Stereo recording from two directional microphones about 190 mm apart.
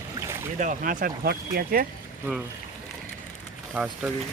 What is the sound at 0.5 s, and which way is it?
Speech, 45° right (ahead or behind).